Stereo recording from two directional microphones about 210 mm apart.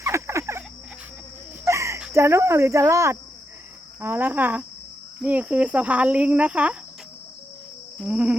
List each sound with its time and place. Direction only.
0.0 s frog: 15° right (ahead or behind)
1.6 s speech: 15° right (ahead or behind)
7.9 s insect: 5° right (ahead or behind)